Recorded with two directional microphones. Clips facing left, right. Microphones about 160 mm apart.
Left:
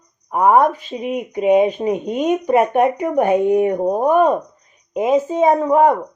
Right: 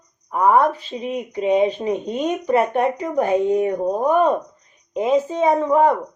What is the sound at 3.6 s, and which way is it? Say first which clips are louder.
Speech: left 3 dB; 55° left (ahead or behind).